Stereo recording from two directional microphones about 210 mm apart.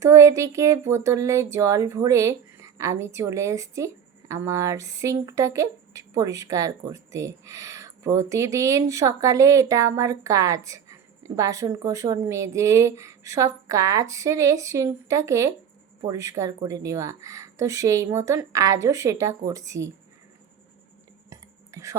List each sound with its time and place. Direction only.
0.0 s speech: 15° right (ahead or behind)
21.2 s cutlery: 15° right (ahead or behind)